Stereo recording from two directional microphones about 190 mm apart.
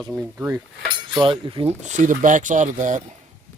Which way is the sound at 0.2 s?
15° right (ahead or behind).